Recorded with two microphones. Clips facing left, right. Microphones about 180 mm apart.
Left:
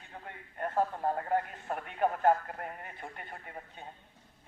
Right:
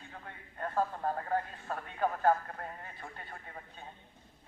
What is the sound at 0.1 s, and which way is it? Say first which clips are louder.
Speech: left 6 dB; 20° left (ahead or behind).